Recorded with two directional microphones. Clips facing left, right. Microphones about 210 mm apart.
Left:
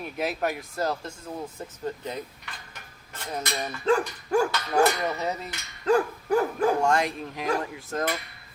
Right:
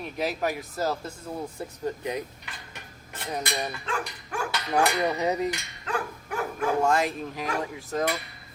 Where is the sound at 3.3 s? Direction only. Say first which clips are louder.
Right 1 dB; 15° right (ahead or behind).